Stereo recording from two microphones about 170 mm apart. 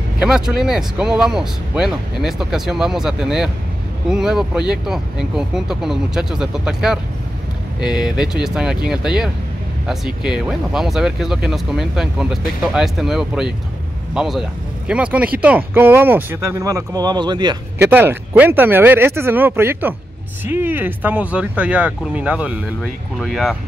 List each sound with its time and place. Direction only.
0.2 s speech: 5° right (ahead or behind); by 17.6 s 25° right (ahead or behind)
17.7 s speech: 10° right (ahead or behind)